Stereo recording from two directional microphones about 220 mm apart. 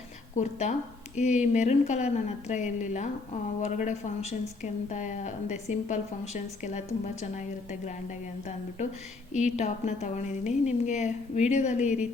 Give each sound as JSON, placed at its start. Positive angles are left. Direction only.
{"t": 0.3, "sound": "a woman's voice", "side_deg": 30}
{"t": 9.3, "sound": "a woman's voice", "side_deg": 30}